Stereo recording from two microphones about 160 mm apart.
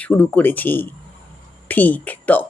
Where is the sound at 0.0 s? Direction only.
10° left (ahead or behind).